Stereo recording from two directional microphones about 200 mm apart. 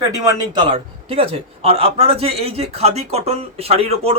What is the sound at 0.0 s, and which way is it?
A man's voice, 20° right (ahead or behind).